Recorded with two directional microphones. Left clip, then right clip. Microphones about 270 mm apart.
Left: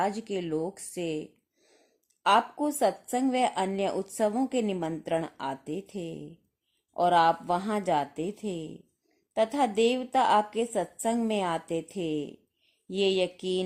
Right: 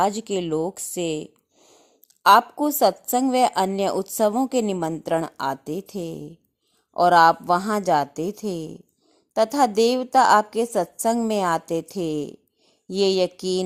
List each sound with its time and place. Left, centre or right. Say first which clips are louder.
0.0 s speech: right 7 dB; right